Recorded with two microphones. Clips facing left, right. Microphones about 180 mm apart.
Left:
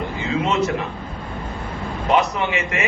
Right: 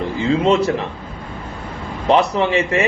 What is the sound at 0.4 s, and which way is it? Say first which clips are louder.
Speech: right 5 dB; 30° right (ahead or behind).